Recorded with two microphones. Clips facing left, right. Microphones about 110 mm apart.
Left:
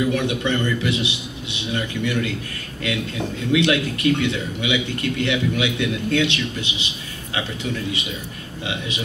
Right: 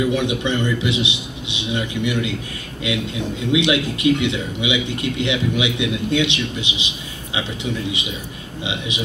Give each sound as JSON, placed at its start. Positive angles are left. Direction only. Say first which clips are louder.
{"t": 0.1, "sound": "a man's voice", "louder": "right 1 dB", "side_deg": -20}
{"t": 8.6, "sound": "a man's voice", "louder": "right 1 dB", "side_deg": -20}